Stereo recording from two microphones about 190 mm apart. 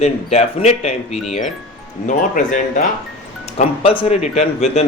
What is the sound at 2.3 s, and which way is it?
Speech, 45° left (ahead or behind).